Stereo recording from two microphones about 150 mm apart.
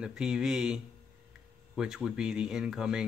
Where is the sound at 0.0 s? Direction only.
5° right (ahead or behind).